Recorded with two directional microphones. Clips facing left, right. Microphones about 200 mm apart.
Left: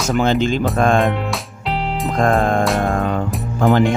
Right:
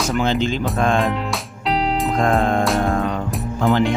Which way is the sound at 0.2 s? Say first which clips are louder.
Left 5 dB; 50° left (ahead or behind).